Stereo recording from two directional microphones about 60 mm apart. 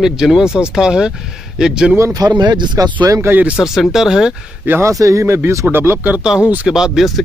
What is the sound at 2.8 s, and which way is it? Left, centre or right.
Speech, right.